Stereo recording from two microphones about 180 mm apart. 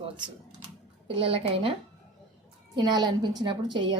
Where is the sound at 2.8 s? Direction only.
25° right (ahead or behind).